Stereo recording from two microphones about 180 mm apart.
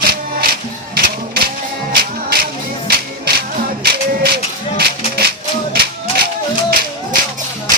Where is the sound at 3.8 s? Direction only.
60° right (ahead or behind).